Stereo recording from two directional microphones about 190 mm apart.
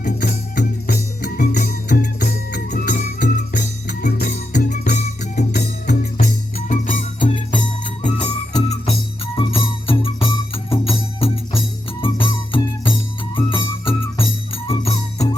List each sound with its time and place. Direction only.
0.0 s music: 60° left (ahead or behind)
6.1 s music: 45° left (ahead or behind)
8.5 s music: 25° left (ahead or behind)